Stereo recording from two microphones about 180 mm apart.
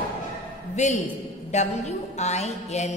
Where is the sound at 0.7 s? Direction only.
40° left (ahead or behind).